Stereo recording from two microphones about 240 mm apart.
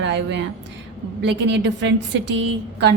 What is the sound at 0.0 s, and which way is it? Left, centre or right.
A woman's voice, right.